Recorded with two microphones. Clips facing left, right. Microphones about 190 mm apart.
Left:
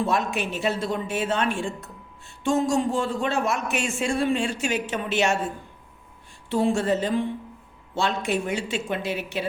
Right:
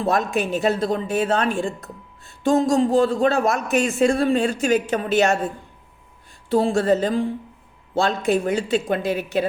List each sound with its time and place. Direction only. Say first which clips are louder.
0.0 s a man's voice: right 4 dB; 40° right (ahead or behind)
6.5 s a man's voice: right 4 dB; 35° right (ahead or behind)